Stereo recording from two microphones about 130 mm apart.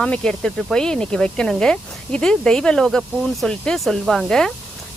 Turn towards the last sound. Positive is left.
turn(degrees=5)  # may be behind; listen again after turning